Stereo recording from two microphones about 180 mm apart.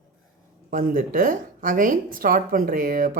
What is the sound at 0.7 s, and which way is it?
Speech, 50° right (ahead or behind).